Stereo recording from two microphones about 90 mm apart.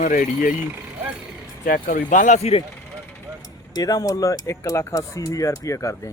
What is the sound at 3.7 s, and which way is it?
Speech, 45° left (ahead or behind).